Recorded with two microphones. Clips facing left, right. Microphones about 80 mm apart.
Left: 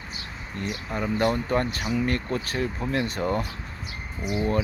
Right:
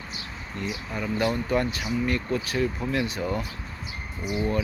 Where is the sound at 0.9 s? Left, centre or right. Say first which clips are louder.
Left 2 dB; left.